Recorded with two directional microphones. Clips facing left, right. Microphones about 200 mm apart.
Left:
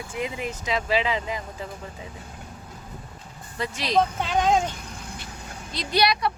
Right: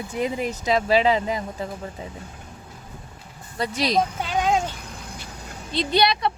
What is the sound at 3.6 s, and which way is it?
Speech, 35° right (ahead or behind).